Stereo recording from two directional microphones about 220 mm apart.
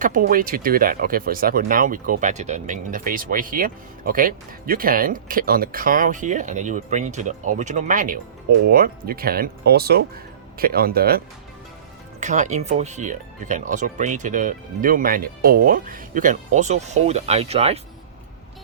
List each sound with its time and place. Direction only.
0.0 s speech: 40° right (ahead or behind)
12.2 s speech: 35° right (ahead or behind)